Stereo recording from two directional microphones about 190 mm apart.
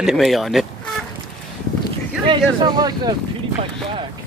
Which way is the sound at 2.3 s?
25° right (ahead or behind).